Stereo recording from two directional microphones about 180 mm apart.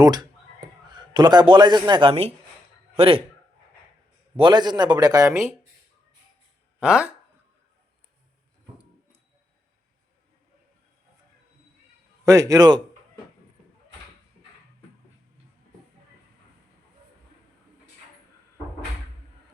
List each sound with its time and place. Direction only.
0.0 s a man's voice: 25° right (ahead or behind)
4.4 s a man's voice: 25° right (ahead or behind)
6.7 s speech: 5° right (ahead or behind)
12.2 s a man's voice: 20° right (ahead or behind)